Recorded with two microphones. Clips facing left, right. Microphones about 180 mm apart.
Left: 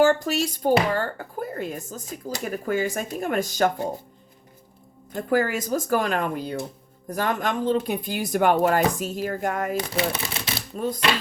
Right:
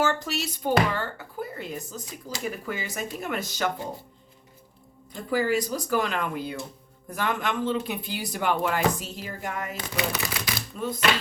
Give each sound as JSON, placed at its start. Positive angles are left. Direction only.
{"t": 0.0, "sound": "speech", "side_deg": 45}
{"t": 5.1, "sound": "speech", "side_deg": 50}
{"t": 9.7, "sound": "speech", "side_deg": 25}
{"t": 10.8, "sound": "speech", "side_deg": 40}